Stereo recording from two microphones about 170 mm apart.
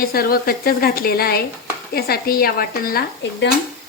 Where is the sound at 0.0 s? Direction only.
60° left (ahead or behind).